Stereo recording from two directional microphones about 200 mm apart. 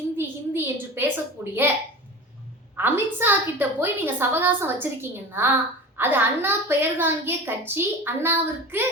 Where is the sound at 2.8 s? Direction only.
10° right (ahead or behind).